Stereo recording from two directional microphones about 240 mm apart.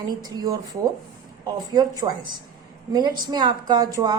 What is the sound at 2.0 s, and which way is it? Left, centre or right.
Speech, centre.